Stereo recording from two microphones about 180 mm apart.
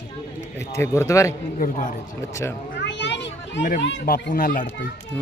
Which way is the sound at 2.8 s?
75° left (ahead or behind).